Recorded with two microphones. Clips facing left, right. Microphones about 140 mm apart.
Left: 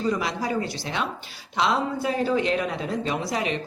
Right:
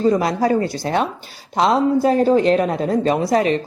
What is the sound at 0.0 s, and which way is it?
Speech, 40° right (ahead or behind).